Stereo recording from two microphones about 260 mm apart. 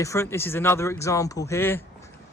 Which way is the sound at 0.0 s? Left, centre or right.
Centre.